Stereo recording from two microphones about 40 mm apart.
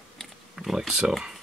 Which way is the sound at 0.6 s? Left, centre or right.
Centre.